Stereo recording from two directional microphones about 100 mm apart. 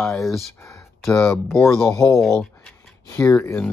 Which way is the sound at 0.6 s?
30° left (ahead or behind).